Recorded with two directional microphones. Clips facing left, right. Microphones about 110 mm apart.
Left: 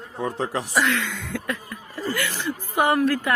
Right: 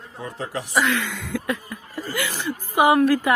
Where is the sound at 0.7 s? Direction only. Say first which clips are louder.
Right 3 dB; centre (ahead or behind).